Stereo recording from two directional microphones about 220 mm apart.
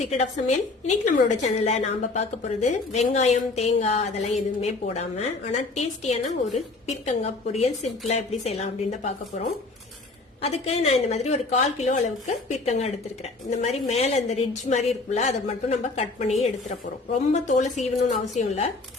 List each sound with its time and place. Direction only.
0.0 s a woman's voice: 30° left (ahead or behind)
10.4 s a woman's voice: 30° left (ahead or behind)